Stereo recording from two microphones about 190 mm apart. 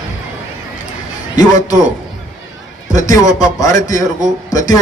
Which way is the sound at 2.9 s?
15° left (ahead or behind).